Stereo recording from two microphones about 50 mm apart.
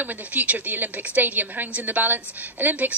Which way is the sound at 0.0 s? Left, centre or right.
Right.